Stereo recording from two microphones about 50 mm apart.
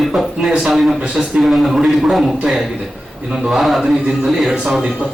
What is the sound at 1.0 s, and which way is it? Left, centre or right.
Speech, centre.